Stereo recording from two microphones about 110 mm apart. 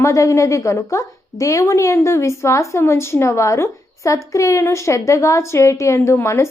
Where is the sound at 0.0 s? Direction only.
30° left (ahead or behind).